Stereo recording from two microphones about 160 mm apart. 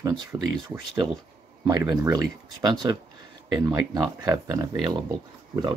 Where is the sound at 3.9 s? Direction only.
25° right (ahead or behind).